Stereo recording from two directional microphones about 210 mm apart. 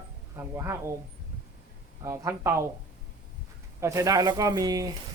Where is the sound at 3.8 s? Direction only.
15° right (ahead or behind).